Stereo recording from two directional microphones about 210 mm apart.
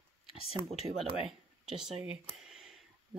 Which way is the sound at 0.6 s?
20° right (ahead or behind).